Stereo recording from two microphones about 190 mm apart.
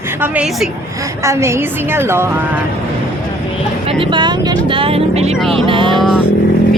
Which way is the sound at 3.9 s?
25° right (ahead or behind).